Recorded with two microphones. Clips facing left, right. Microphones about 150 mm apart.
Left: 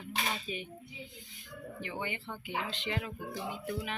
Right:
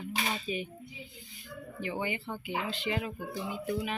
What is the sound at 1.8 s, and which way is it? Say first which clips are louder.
Speech: right 5 dB; 5° right (ahead or behind).